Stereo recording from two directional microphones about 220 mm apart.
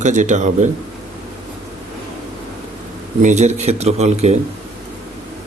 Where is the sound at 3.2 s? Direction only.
30° right (ahead or behind).